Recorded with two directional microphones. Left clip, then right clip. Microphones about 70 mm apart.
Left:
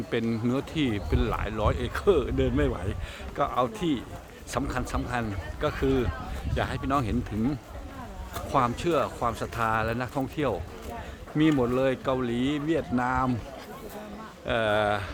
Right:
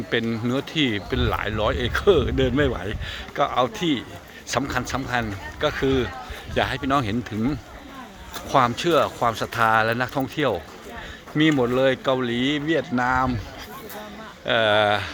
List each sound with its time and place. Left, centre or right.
0.3 s speech: centre
2.3 s speech: right
2.7 s speech: centre
8.4 s speech: right
10.2 s speech: right
11.6 s speech: right
14.4 s speech: centre